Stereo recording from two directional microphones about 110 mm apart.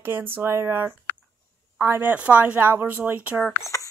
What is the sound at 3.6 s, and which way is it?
Speech, 30° left (ahead or behind).